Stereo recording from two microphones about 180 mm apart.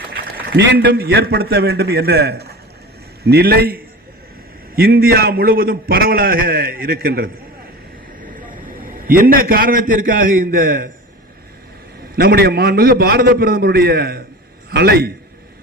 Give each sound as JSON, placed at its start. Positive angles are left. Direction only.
{"t": 0.3, "sound": "a man's voice", "side_deg": -65}
{"t": 8.4, "sound": "a man's voice", "side_deg": -50}
{"t": 12.1, "sound": "a man's voice", "side_deg": -60}